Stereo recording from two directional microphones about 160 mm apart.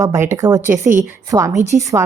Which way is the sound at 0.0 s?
15° right (ahead or behind).